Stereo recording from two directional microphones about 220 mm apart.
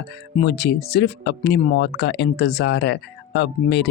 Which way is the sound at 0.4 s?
45° left (ahead or behind).